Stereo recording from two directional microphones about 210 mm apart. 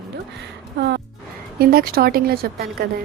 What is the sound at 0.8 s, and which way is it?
A woman's voice, 50° right (ahead or behind).